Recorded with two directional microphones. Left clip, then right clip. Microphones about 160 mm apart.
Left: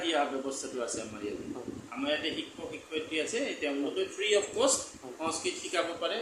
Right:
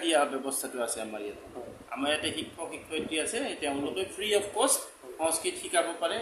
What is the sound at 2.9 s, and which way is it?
A man's voice, 25° right (ahead or behind).